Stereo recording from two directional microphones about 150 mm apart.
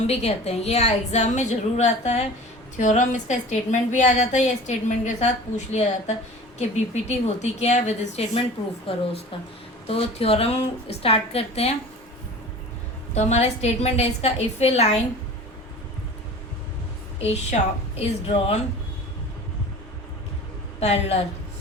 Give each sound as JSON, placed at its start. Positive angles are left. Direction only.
{"t": 0.1, "sound": "a woman's voice", "side_deg": 45}
{"t": 13.1, "sound": "a woman's voice", "side_deg": 50}
{"t": 17.2, "sound": "a woman's voice", "side_deg": 45}
{"t": 20.7, "sound": "a woman's voice", "side_deg": 45}